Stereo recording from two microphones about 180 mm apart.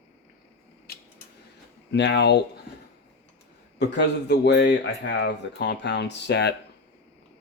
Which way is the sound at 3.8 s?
70° left (ahead or behind).